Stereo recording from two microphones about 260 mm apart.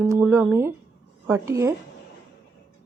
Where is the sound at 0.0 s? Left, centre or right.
Centre.